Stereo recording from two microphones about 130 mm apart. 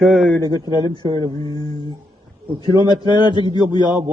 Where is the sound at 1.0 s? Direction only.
40° right (ahead or behind).